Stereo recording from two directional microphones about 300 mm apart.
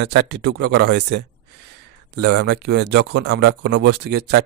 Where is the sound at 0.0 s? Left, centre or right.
Right.